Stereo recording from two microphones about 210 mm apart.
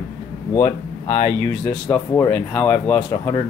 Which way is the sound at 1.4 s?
5° left (ahead or behind).